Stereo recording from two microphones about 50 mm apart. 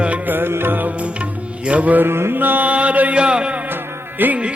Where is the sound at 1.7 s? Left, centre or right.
Right.